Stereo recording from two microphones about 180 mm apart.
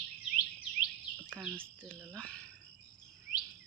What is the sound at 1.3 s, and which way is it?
Speech, 5° right (ahead or behind).